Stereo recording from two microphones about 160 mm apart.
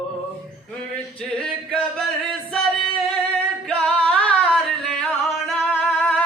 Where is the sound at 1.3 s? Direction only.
5° left (ahead or behind).